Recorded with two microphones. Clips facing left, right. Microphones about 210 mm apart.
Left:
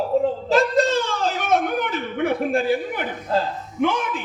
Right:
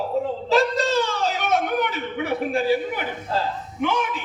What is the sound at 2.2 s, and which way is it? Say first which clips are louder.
A man's voice: left 2 dB; 50° left (ahead or behind).